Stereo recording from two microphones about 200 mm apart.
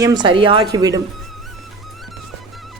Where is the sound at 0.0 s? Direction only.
20° right (ahead or behind).